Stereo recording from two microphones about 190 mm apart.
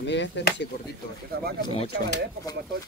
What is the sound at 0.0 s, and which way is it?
Speech, 70° left (ahead or behind).